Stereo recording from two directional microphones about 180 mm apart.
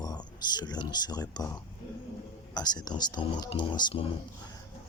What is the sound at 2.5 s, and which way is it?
Speech, 20° left (ahead or behind).